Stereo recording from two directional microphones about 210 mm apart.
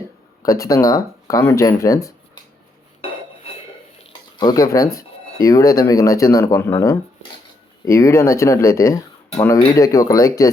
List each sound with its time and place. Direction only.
0.4 s speech: 15° left (ahead or behind)
4.4 s speech: 15° left (ahead or behind)